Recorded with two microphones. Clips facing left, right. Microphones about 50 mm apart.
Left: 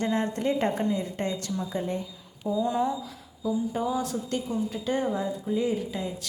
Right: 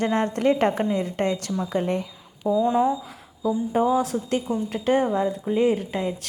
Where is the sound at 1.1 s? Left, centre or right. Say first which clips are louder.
Right 5 dB; right.